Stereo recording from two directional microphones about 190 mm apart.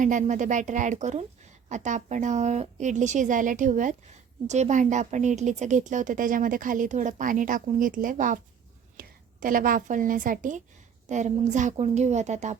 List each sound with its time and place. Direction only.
0.0 s a woman's voice: 40° right (ahead or behind)